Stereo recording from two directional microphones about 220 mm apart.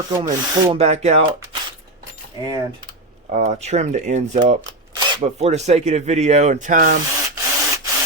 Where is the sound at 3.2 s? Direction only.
30° right (ahead or behind).